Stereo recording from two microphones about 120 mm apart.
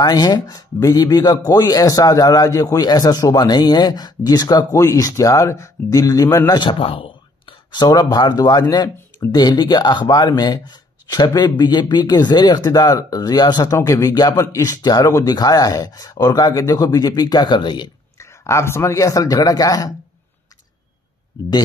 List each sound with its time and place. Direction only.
0.0 s a man's voice: 35° left (ahead or behind)
6.6 s speech: 45° left (ahead or behind)
13.7 s speech: 25° left (ahead or behind); by 17.9 s 40° left (ahead or behind)
18.1 s a man's voice: 25° left (ahead or behind)